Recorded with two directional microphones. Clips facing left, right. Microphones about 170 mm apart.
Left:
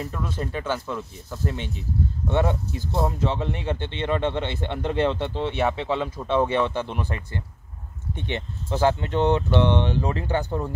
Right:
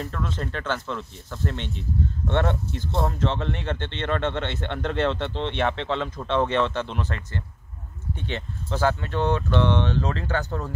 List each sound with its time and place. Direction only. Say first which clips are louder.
0.0 s speech: even; 10° left (ahead or behind)